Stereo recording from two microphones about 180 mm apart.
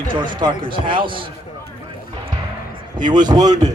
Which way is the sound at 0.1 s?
25° right (ahead or behind).